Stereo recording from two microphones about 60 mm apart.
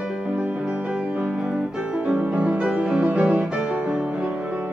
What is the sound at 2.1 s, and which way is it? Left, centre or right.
Music, right.